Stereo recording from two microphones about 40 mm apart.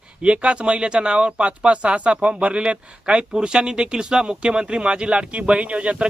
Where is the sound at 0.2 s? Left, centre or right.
Right.